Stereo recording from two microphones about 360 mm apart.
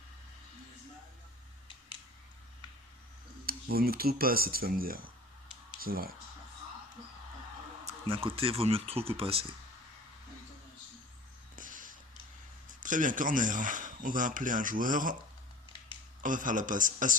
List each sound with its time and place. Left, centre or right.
3.4 s speech: right
7.9 s speech: centre
11.5 s a sound: right
12.8 s speech: right
16.2 s speech: right